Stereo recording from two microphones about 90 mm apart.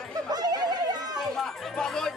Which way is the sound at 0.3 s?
50° right (ahead or behind).